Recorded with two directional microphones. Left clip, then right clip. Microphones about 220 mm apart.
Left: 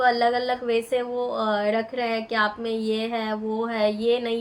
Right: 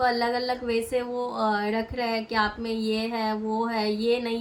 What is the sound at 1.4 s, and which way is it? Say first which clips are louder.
A woman's voice: left 2 dB; 15° right (ahead or behind).